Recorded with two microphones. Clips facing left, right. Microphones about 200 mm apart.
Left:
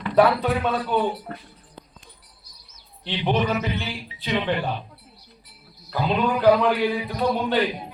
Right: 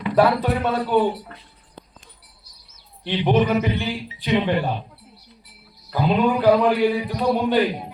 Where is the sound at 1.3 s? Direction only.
50° left (ahead or behind).